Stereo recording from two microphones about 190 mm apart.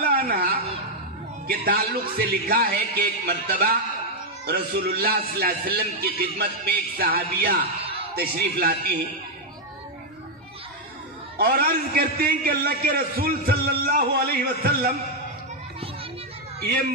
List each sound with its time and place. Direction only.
0.0 s a woman's voice: 50° right (ahead or behind)
7.8 s a sound: 30° right (ahead or behind)
8.2 s a man's voice: 50° right (ahead or behind)
11.3 s a man's voice: 50° right (ahead or behind)
16.5 s speech: 55° right (ahead or behind)